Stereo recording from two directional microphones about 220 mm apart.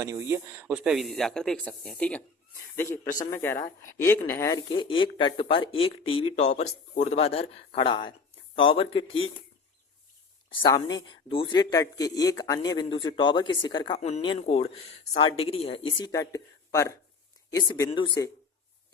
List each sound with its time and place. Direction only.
0.0 s speech: 15° right (ahead or behind); by 9.2 s 25° left (ahead or behind)
10.6 s speech: 20° left (ahead or behind)